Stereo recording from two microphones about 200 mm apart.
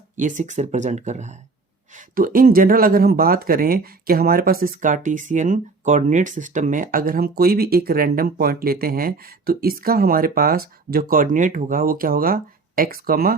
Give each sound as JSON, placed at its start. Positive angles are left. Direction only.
{"t": 0.2, "sound": "speech", "side_deg": -40}